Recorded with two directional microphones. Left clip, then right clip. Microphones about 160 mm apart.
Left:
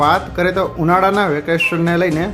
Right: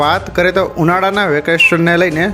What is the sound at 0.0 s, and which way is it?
Speech, 25° right (ahead or behind).